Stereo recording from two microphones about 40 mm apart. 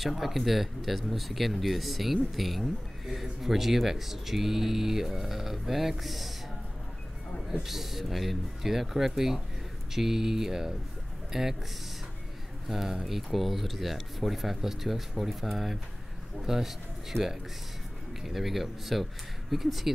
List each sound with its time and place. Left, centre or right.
0.0 s speech: centre
7.6 s speech: centre
12.6 s speech: centre